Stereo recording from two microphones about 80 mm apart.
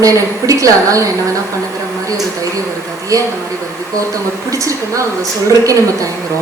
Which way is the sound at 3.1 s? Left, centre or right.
Right.